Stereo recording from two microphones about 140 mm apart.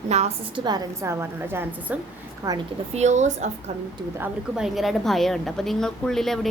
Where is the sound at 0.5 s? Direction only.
30° right (ahead or behind).